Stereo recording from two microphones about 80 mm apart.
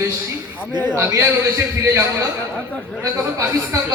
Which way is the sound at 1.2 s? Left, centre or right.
Right.